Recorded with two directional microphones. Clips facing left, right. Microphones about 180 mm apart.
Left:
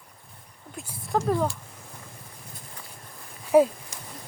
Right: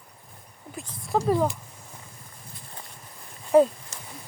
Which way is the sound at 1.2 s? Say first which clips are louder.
Right 3 dB; 10° right (ahead or behind).